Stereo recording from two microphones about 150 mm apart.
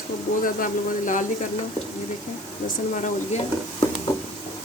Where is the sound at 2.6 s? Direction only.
55° left (ahead or behind).